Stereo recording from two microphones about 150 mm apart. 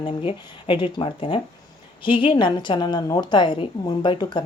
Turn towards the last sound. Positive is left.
turn(degrees=30)  # may be behind; listen again after turning